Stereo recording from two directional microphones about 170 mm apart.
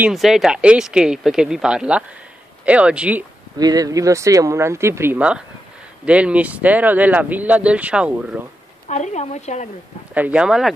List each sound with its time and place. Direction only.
0.0 s speech: centre (ahead or behind)
3.5 s speech: 20° right (ahead or behind)
8.8 s speech: 45° left (ahead or behind)
10.1 s speech: 10° right (ahead or behind)